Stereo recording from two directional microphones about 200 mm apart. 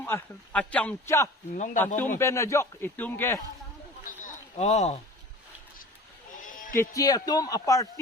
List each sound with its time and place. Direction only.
0.0 s a man's voice: 5° left (ahead or behind)
1.5 s speech: 40° left (ahead or behind)
2.1 s a man's voice: 15° left (ahead or behind)
4.0 s a sound: 40° left (ahead or behind)
6.4 s bleat: 40° left (ahead or behind)
6.7 s a man's voice: 20° left (ahead or behind)